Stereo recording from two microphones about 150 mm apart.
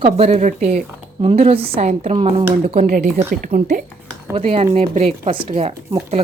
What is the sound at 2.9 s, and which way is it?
Speech, 60° right (ahead or behind).